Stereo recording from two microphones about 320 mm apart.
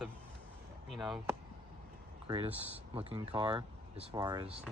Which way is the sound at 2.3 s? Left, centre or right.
Centre.